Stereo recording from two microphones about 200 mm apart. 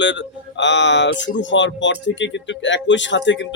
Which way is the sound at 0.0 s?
65° left (ahead or behind).